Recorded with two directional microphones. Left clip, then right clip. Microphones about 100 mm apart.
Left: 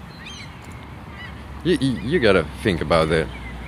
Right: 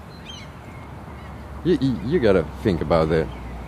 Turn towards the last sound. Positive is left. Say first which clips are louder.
# left 1 dB
turn(degrees=-20)  # may be behind; listen again after turning